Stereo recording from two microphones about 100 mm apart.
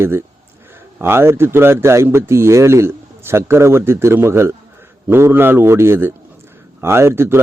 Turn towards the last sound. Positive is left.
turn(degrees=-25)  # may be behind; listen again after turning